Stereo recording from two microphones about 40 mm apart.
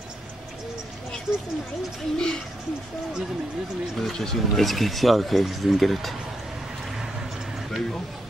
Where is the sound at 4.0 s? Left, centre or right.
Centre.